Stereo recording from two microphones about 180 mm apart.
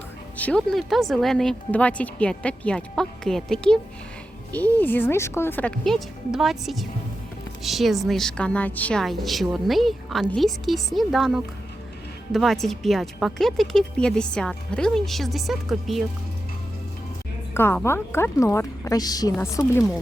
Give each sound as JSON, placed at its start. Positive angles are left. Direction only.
{"t": 0.3, "sound": "a woman's voice", "side_deg": 5}
{"t": 17.5, "sound": "a woman's voice", "side_deg": 10}